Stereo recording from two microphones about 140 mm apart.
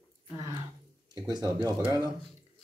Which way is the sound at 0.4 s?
25° right (ahead or behind).